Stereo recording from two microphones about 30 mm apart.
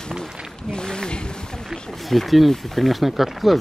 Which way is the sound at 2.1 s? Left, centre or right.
Centre.